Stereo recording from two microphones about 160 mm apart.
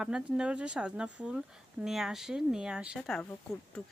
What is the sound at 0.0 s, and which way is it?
Speech, 5° right (ahead or behind).